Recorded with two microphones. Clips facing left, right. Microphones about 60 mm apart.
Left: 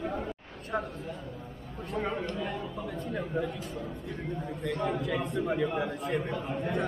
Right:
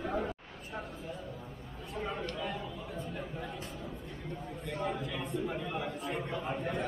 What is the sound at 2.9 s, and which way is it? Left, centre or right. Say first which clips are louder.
Speech: left 9 dB; left.